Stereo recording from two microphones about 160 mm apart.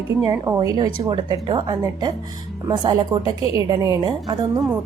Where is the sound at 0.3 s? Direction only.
20° right (ahead or behind).